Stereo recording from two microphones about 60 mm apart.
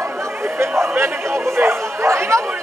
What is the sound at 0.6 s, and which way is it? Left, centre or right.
Speech, right.